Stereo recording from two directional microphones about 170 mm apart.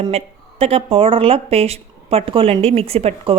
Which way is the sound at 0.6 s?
35° right (ahead or behind).